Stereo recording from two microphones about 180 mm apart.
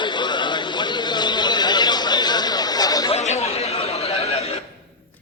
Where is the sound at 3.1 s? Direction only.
40° left (ahead or behind).